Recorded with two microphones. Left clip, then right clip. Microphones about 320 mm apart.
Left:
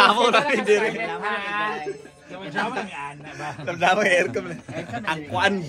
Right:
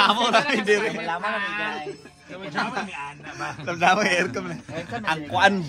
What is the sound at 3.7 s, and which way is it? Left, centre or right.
Speech, centre.